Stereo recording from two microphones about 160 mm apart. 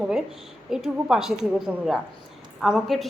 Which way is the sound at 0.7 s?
5° right (ahead or behind).